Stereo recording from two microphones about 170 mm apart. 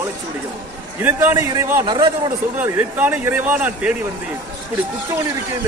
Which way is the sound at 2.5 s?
10° right (ahead or behind).